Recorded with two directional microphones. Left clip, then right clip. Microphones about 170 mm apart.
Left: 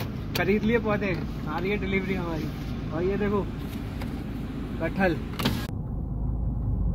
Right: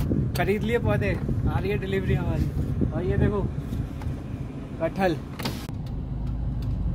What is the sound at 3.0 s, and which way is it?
Speech, 30° right (ahead or behind).